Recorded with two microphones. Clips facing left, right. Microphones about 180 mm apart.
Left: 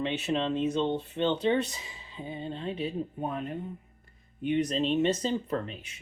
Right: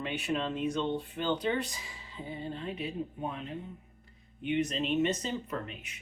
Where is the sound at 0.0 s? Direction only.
25° left (ahead or behind).